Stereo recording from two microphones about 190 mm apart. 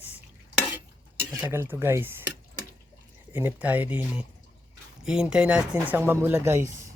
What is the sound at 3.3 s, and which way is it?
Speech, 10° right (ahead or behind).